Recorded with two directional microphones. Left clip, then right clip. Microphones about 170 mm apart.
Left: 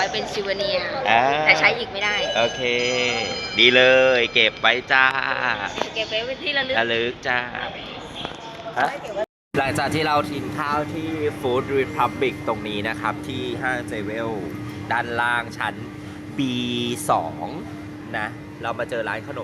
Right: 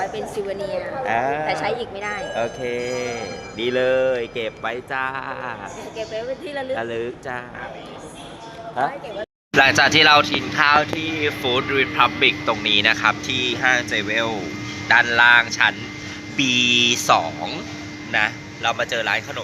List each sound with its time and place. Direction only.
0.0 s a woman's voice: 30° right (ahead or behind)
1.0 s speech: 5° right (ahead or behind)
1.6 s a woman's voice: 30° right (ahead or behind)
2.3 s speech: 10° right (ahead or behind)
3.5 s speech: 5° left (ahead or behind)
6.0 s a woman's voice: 35° right (ahead or behind)
6.7 s speech: 5° left (ahead or behind)
9.6 s speech: 5° left (ahead or behind); by 18.3 s 20° left (ahead or behind)
18.6 s speech: 40° left (ahead or behind)